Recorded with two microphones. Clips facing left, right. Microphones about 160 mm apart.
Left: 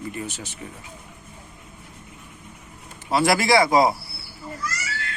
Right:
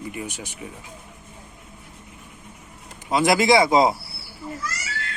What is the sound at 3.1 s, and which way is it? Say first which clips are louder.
Speech: right 1 dB; 20° right (ahead or behind).